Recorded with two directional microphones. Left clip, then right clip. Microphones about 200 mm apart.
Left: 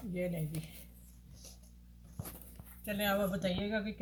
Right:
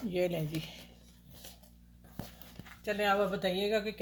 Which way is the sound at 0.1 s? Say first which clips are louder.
Right 6 dB; 40° right (ahead or behind).